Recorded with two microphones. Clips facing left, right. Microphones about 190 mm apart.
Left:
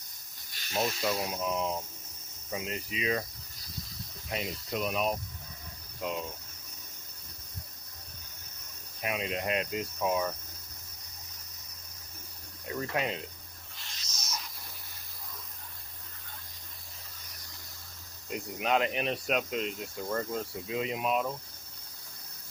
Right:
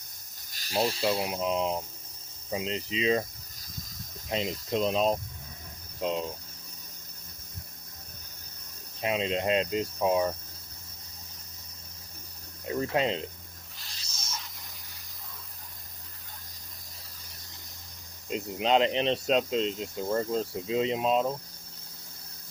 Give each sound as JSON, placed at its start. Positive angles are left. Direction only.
{"t": 0.5, "sound": "speech", "side_deg": -35}
{"t": 4.3, "sound": "speech", "side_deg": -20}
{"t": 9.0, "sound": "speech", "side_deg": -25}
{"t": 12.6, "sound": "speech", "side_deg": -25}
{"t": 13.8, "sound": "a sound", "side_deg": -30}
{"t": 18.3, "sound": "speech", "side_deg": -25}